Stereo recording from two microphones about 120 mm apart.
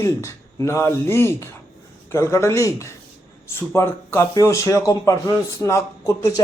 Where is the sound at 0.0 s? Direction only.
25° left (ahead or behind).